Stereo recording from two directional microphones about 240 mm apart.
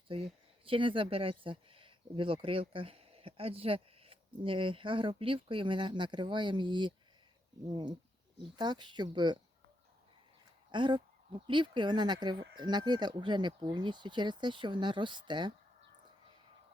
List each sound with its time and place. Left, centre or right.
0.6 s speech: right
10.7 s speech: centre